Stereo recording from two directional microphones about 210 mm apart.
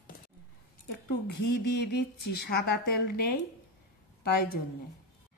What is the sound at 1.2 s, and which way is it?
A woman's voice, 55° left (ahead or behind).